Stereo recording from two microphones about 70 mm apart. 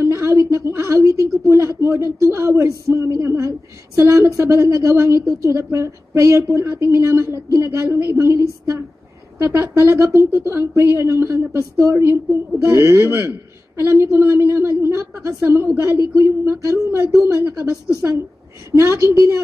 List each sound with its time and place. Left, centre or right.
0.0 s a sound: right
1.5 s a man's voice: right
8.4 s a man's voice: right